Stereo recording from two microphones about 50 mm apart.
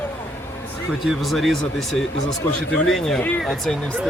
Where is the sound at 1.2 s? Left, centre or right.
Centre.